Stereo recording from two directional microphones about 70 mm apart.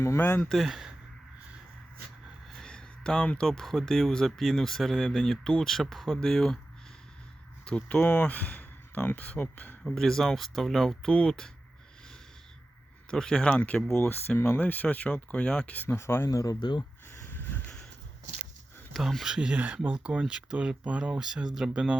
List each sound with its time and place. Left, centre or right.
0.2 s speech: left
0.4 s speech: centre
2.5 s speech: centre
7.6 s speech: centre
9.8 s speech: centre
13.1 s speech: centre
14.1 s speech: left
14.6 s speech: left
16.0 s speech: left
16.3 s speech: left
17.1 s a sound: left
18.9 s speech: centre